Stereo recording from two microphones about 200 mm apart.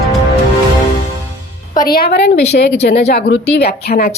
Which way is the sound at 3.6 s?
50° left (ahead or behind).